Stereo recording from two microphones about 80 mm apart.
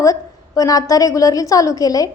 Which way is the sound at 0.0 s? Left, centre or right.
Left.